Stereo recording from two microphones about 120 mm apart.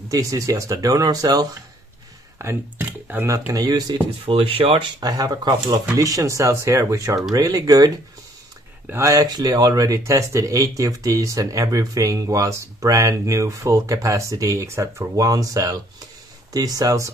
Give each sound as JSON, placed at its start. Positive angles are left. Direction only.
{"t": 0.1, "sound": "speech", "side_deg": -30}
{"t": 2.3, "sound": "speech", "side_deg": -20}
{"t": 3.3, "sound": "speech", "side_deg": -25}
{"t": 4.3, "sound": "speech", "side_deg": -50}
{"t": 5.0, "sound": "speech", "side_deg": -30}